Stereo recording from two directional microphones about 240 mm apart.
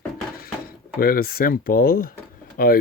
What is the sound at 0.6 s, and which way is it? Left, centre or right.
Speech, left.